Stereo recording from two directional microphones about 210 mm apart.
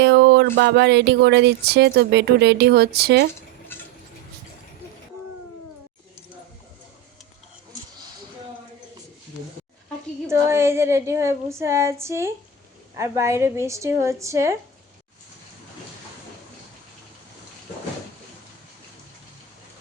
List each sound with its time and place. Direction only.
0.0 s a sound: 55° right (ahead or behind)
0.5 s speech: 55° right (ahead or behind)
10.2 s speech: 10° right (ahead or behind)